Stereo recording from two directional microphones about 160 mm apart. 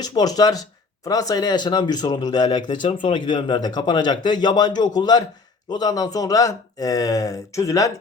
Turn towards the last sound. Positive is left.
turn(degrees=20)  # may be behind; listen again after turning